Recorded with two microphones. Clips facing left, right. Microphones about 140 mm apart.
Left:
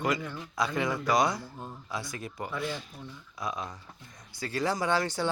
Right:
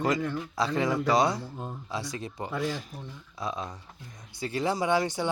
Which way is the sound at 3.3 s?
30° right (ahead or behind).